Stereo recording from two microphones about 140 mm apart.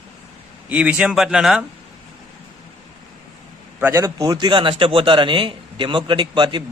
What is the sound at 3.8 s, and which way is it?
A man's voice, 20° right (ahead or behind).